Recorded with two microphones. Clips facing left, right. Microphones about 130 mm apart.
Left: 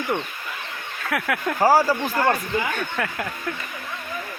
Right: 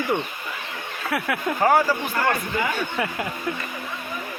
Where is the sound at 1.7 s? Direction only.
25° left (ahead or behind).